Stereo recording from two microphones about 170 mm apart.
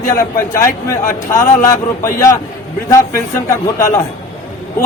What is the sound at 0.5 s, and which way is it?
A man's voice, 15° left (ahead or behind).